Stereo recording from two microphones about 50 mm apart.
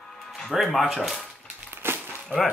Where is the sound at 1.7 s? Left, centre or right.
Right.